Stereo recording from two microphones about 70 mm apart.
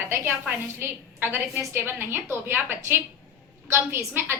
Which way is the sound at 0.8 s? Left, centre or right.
Right.